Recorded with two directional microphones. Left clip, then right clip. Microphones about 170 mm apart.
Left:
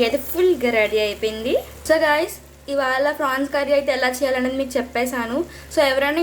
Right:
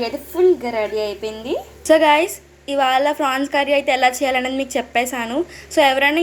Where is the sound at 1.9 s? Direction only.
15° right (ahead or behind).